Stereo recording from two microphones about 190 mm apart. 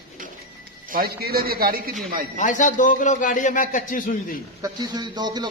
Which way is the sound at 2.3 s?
40° left (ahead or behind).